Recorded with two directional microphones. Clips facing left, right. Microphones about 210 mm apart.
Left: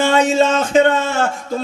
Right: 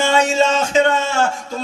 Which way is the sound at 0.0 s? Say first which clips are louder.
Left 2 dB; 55° left (ahead or behind).